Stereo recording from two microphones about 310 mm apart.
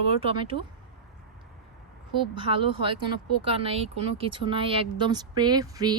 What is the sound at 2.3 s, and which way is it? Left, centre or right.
Speech, centre.